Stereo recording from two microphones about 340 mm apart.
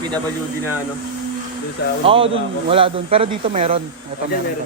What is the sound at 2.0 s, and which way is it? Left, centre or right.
Speech, centre.